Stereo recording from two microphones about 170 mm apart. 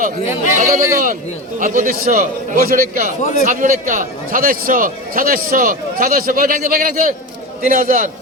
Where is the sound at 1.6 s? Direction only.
50° right (ahead or behind).